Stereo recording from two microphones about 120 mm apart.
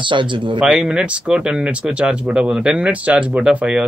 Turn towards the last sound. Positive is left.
turn(degrees=-10)  # may be behind; listen again after turning